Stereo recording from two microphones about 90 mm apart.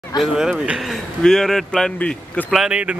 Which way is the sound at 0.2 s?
5° right (ahead or behind).